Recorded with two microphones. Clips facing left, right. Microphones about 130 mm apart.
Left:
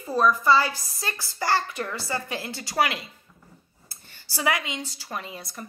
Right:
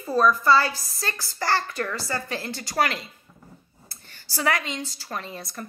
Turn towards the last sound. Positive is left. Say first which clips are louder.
# right 2 dB
turn(degrees=15)  # may be behind; listen again after turning